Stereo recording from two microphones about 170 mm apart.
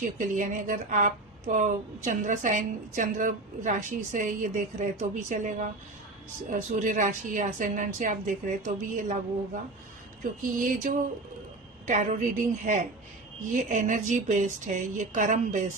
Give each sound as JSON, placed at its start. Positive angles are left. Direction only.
{"t": 0.0, "sound": "speech", "side_deg": -50}
{"t": 11.9, "sound": "speech", "side_deg": -45}